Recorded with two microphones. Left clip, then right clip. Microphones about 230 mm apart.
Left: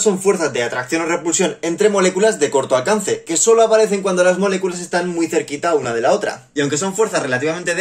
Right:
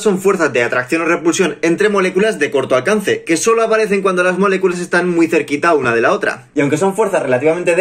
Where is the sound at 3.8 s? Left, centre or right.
Centre.